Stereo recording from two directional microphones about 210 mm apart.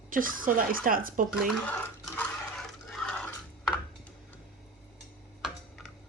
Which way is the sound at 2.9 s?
Centre (ahead or behind).